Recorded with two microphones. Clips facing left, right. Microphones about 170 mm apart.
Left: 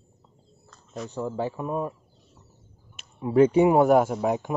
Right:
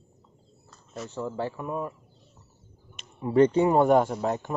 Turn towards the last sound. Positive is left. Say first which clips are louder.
# left 2 dB
turn(degrees=10)  # may be behind; listen again after turning